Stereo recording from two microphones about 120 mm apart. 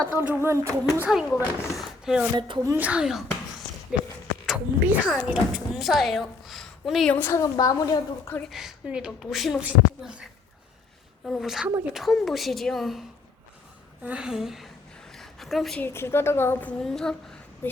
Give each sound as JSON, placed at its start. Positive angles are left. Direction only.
{"t": 0.3, "sound": "speech", "side_deg": -20}
{"t": 1.3, "sound": "speech", "side_deg": 0}
{"t": 2.6, "sound": "a child's voice", "side_deg": -15}
{"t": 7.1, "sound": "a woman's voice", "side_deg": 20}
{"t": 8.4, "sound": "speech", "side_deg": -5}
{"t": 11.3, "sound": "speech", "side_deg": 0}
{"t": 15.2, "sound": "a sound", "side_deg": 0}
{"t": 15.8, "sound": "a woman's voice", "side_deg": 20}
{"t": 17.6, "sound": "speech", "side_deg": 15}